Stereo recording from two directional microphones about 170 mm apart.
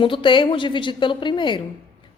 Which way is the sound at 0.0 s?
30° left (ahead or behind).